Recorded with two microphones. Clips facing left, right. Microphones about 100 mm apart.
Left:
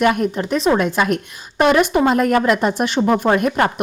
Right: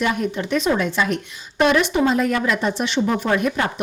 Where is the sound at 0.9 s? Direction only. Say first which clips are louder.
Left 3 dB; 50° left (ahead or behind).